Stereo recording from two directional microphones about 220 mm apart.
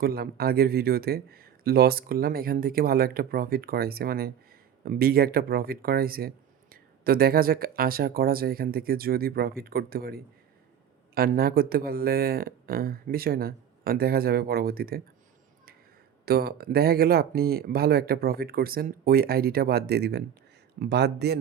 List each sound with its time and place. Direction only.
0.0 s speech: 45° right (ahead or behind)
16.2 s speech: 45° right (ahead or behind)